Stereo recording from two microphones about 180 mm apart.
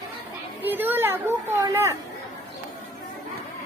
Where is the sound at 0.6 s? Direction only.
10° right (ahead or behind).